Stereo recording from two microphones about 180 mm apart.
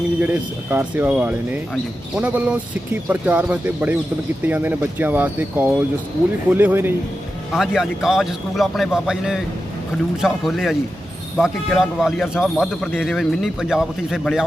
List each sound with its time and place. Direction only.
0.2 s speech: 10° right (ahead or behind)